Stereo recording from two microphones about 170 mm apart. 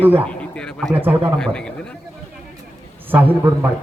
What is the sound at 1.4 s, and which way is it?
Speech, 5° left (ahead or behind).